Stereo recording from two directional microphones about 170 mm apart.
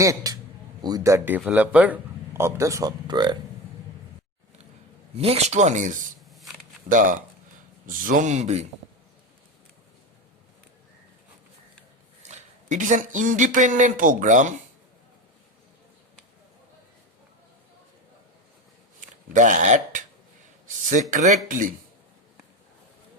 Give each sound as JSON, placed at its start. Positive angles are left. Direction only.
{"t": 0.0, "sound": "a man's voice", "side_deg": -20}
{"t": 5.1, "sound": "speech", "side_deg": -35}
{"t": 12.2, "sound": "speech", "side_deg": -45}
{"t": 18.9, "sound": "a man's voice", "side_deg": -50}